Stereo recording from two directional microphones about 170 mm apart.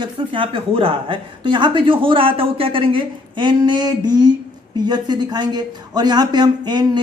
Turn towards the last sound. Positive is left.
turn(degrees=-25)  # may be behind; listen again after turning